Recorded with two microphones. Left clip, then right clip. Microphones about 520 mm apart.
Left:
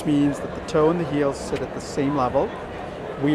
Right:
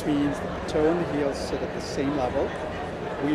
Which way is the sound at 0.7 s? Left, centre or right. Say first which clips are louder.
Left 4 dB; left.